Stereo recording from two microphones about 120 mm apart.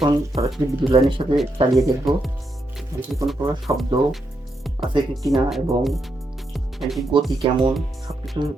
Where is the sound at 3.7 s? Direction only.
25° right (ahead or behind).